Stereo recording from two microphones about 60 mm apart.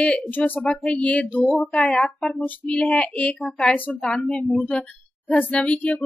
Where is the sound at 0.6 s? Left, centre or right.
Centre.